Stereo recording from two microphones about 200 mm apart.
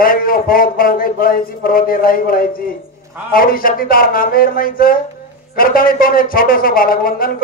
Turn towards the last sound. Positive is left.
turn(degrees=45)  # may be behind; listen again after turning